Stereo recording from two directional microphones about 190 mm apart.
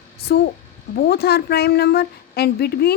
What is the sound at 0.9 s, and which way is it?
A woman's voice, 55° left (ahead or behind).